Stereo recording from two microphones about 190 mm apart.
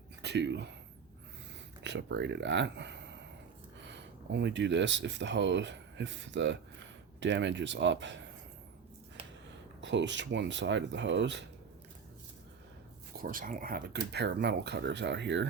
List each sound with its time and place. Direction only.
0.2 s speech: 65° right (ahead or behind)
1.8 s speech: 65° right (ahead or behind)
9.8 s speech: 70° right (ahead or behind)
13.2 s speech: 45° right (ahead or behind); by 15.4 s 70° right (ahead or behind)